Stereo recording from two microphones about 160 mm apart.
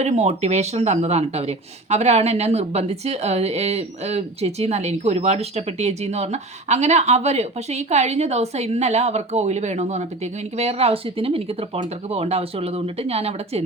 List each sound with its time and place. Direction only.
0.0 s speech: 45° right (ahead or behind)